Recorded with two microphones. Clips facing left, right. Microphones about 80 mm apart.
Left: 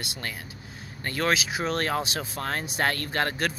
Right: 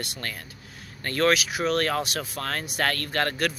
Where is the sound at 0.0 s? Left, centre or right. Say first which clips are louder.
Right 1 dB; centre.